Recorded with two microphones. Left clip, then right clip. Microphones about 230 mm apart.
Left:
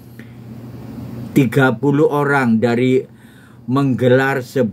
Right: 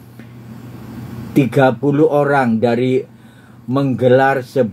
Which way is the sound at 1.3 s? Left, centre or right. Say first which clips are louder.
Right 2 dB; left.